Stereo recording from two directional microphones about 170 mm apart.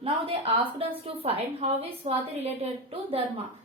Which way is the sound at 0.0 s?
35° right (ahead or behind).